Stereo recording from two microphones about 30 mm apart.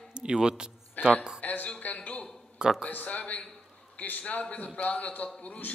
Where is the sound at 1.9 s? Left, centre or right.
Left.